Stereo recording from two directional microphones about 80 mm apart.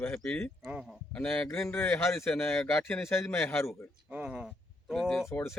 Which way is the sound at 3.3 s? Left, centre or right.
Left.